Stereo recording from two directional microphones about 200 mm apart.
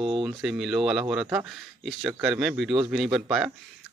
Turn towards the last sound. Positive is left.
turn(degrees=-5)  # may be behind; listen again after turning